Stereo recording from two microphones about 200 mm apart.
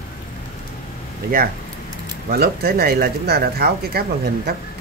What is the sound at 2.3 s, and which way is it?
Speech, 50° right (ahead or behind).